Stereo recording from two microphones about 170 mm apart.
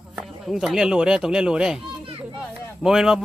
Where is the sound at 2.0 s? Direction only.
35° right (ahead or behind).